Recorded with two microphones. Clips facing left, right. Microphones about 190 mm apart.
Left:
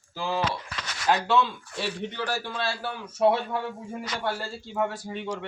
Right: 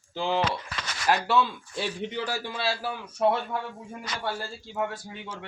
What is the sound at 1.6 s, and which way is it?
Speech, 75° left (ahead or behind).